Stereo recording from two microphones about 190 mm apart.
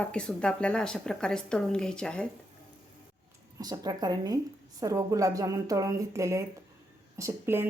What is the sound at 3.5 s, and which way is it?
A woman's voice, 20° right (ahead or behind).